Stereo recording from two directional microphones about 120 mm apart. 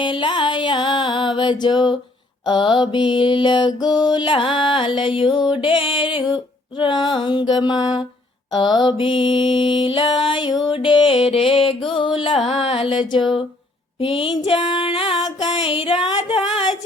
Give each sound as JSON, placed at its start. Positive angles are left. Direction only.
{"t": 0.0, "sound": "music", "side_deg": 40}
{"t": 14.6, "sound": "female singing", "side_deg": 45}
{"t": 15.6, "sound": "music", "side_deg": 50}